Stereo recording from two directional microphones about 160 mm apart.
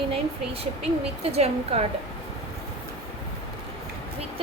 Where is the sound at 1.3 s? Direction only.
40° right (ahead or behind).